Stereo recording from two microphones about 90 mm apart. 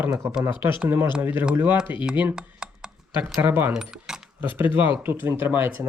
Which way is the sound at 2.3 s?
10° right (ahead or behind).